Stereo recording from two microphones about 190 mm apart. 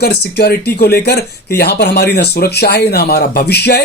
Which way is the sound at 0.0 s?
55° left (ahead or behind).